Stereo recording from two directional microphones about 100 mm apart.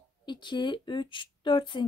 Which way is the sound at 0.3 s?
50° left (ahead or behind).